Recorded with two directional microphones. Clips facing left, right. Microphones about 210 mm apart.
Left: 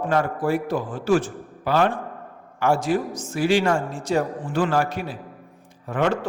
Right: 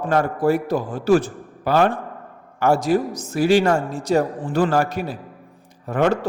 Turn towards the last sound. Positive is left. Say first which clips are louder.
# right 3 dB
turn(degrees=-40)  # may be behind; listen again after turning